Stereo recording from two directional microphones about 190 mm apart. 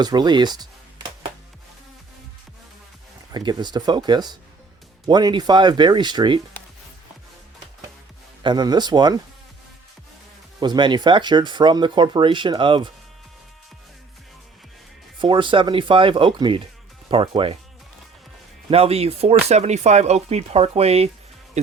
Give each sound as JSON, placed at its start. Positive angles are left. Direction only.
{"t": 0.0, "sound": "speech", "side_deg": -20}
{"t": 3.3, "sound": "speech", "side_deg": -20}
{"t": 8.4, "sound": "speech", "side_deg": -20}
{"t": 10.6, "sound": "speech", "side_deg": -25}
{"t": 15.2, "sound": "speech", "side_deg": -25}
{"t": 18.7, "sound": "speech", "side_deg": -30}